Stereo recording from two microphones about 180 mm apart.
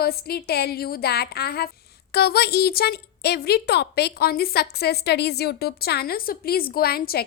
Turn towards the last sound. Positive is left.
turn(degrees=60)  # may be behind; listen again after turning